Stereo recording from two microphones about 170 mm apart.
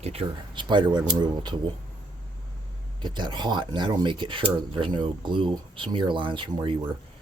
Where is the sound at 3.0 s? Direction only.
25° right (ahead or behind).